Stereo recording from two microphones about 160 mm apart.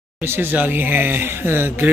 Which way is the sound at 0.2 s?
15° right (ahead or behind).